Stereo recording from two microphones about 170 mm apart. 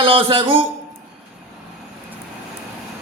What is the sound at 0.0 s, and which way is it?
Speech, 30° right (ahead or behind).